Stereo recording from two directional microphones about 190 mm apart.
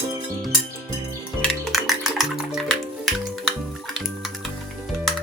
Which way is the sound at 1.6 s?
Centre (ahead or behind).